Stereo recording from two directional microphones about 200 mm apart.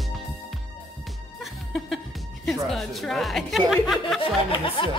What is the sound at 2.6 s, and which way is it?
Speech, centre (ahead or behind).